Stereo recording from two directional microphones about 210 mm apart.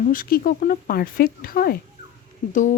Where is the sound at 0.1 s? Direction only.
45° left (ahead or behind).